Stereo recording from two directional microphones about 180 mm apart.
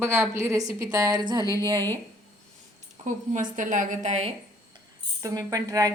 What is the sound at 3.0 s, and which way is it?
A woman's voice, 45° right (ahead or behind).